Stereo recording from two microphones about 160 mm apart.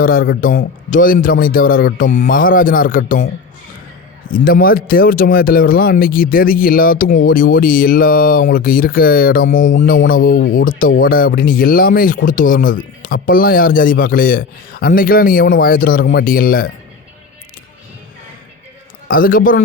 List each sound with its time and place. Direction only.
0.0 s speech: 65° left (ahead or behind)
4.3 s speech: 65° left (ahead or behind)
19.0 s speech: 60° left (ahead or behind)